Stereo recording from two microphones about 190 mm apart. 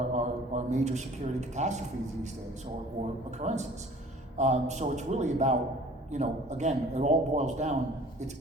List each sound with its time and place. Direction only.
0.1 s a man's voice: 40° right (ahead or behind)
3.4 s a man's voice: 35° right (ahead or behind)